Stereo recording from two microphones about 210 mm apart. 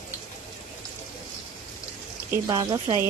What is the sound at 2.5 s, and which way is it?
Speech, 20° right (ahead or behind).